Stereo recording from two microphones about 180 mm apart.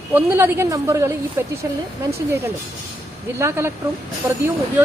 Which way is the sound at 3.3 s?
15° right (ahead or behind).